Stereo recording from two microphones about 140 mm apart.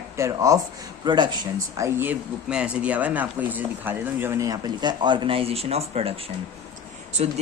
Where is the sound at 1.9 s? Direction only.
15° right (ahead or behind); by 6.1 s 45° right (ahead or behind).